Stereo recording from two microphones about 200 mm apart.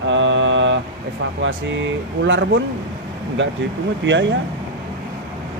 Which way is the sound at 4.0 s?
65° right (ahead or behind).